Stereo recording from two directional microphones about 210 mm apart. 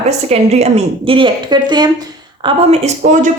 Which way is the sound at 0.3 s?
30° right (ahead or behind).